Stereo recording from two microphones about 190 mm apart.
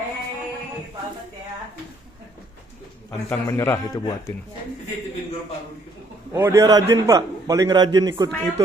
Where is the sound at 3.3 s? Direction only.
15° left (ahead or behind).